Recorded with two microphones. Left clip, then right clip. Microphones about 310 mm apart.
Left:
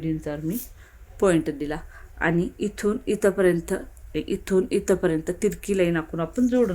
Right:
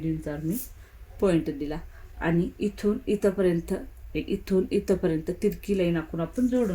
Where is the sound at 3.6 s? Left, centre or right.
Left.